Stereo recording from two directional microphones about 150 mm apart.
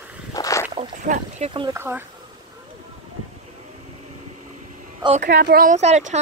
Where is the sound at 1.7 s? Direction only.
15° right (ahead or behind).